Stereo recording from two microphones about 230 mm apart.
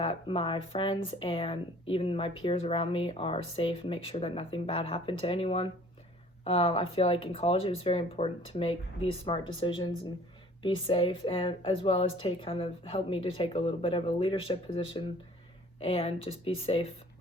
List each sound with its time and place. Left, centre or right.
0.0 s speech: left